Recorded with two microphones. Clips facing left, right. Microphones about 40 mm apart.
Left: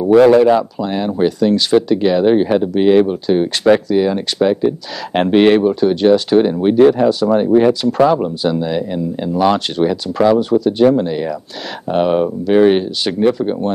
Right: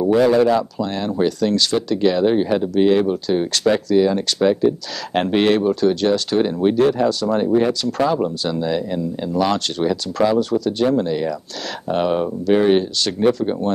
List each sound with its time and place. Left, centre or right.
0.4 s speech: centre